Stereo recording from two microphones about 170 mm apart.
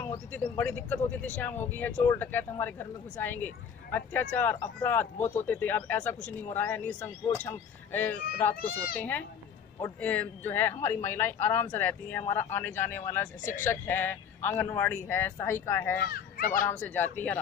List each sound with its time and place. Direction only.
0.0 s speech: 15° left (ahead or behind)
8.5 s a child's voice: 60° left (ahead or behind)
9.8 s speech: 10° left (ahead or behind)
13.4 s speech: 50° left (ahead or behind)
13.7 s speech: 10° left (ahead or behind)
16.1 s a child's voice: 55° left (ahead or behind)
16.6 s speech: 10° left (ahead or behind)